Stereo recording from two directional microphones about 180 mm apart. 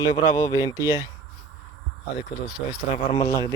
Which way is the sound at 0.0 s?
20° left (ahead or behind).